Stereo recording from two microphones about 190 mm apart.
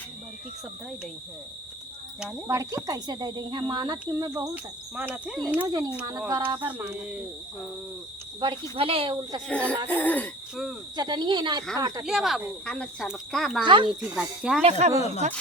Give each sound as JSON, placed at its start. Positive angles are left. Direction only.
{"t": 2.5, "sound": "speech", "side_deg": -15}
{"t": 4.0, "sound": "cricket", "side_deg": -15}
{"t": 5.6, "sound": "speech", "side_deg": -20}
{"t": 6.7, "sound": "cricket", "side_deg": -5}
{"t": 8.7, "sound": "speech", "side_deg": -30}
{"t": 9.5, "sound": "speech", "side_deg": 5}
{"t": 10.9, "sound": "speech", "side_deg": -20}
{"t": 12.0, "sound": "speech", "side_deg": 0}
{"t": 13.7, "sound": "speech", "side_deg": -25}
{"t": 14.0, "sound": "speech", "side_deg": -5}
{"t": 14.6, "sound": "speech", "side_deg": -35}